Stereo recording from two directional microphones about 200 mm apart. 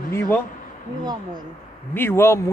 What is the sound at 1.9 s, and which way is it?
Speech, 10° left (ahead or behind).